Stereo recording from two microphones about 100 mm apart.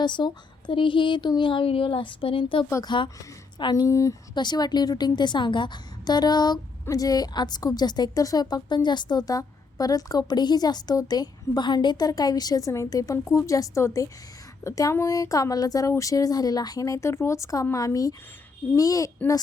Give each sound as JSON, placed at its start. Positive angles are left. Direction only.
{"t": 0.0, "sound": "a woman's voice", "side_deg": 50}
{"t": 3.8, "sound": "a woman's voice", "side_deg": 30}
{"t": 4.4, "sound": "a woman's voice", "side_deg": 45}